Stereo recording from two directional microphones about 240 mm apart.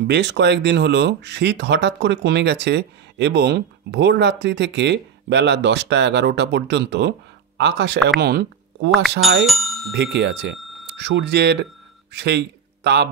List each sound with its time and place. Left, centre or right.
0.0 s speech: right
9.5 s bicycle bell: centre
9.9 s a man's voice: right